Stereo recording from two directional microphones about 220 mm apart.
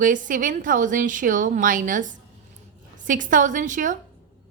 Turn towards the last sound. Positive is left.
turn(degrees=-35)  # may be behind; listen again after turning